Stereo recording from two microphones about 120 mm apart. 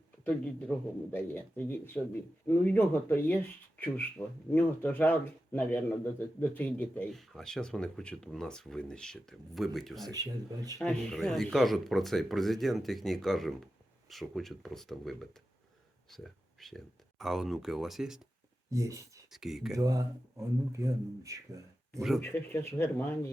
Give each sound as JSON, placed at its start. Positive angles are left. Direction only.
{"t": 0.7, "sound": "speech", "side_deg": 10}
{"t": 7.1, "sound": "speech", "side_deg": 0}
{"t": 10.1, "sound": "speech", "side_deg": -30}
{"t": 10.8, "sound": "speech", "side_deg": 5}
{"t": 18.7, "sound": "speech", "side_deg": -25}
{"t": 19.3, "sound": "speech", "side_deg": -5}
{"t": 19.7, "sound": "speech", "side_deg": -30}
{"t": 22.2, "sound": "speech", "side_deg": 20}